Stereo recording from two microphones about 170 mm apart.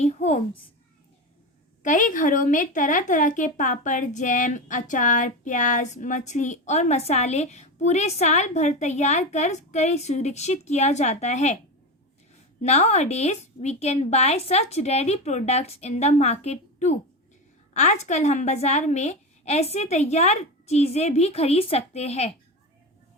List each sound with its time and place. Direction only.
0.0 s a woman's voice: 40° left (ahead or behind)
1.8 s a woman's voice: 50° left (ahead or behind)
12.6 s a woman's voice: 40° left (ahead or behind)